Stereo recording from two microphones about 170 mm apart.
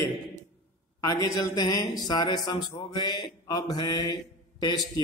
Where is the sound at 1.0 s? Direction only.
25° left (ahead or behind).